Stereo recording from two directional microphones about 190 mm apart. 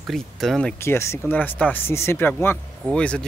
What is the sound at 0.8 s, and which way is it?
Speech, 15° left (ahead or behind).